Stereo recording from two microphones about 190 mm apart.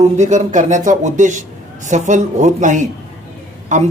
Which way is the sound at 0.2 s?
40° right (ahead or behind).